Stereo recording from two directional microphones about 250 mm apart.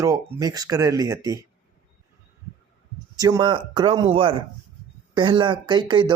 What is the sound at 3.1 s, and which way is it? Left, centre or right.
Speech, centre.